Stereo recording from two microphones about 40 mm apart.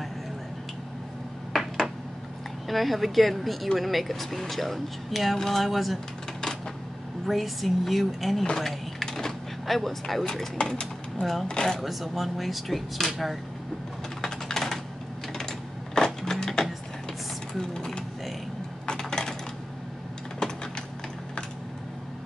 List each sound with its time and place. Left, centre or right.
1.5 s a sound: centre
2.7 s speech: centre
7.2 s speech: centre
8.5 s a sound: centre
10.2 s speech: centre
11.8 s speech: centre
14.2 s typing: centre
15.3 s typewriter: centre
17.6 s speech: centre
18.9 s coin: centre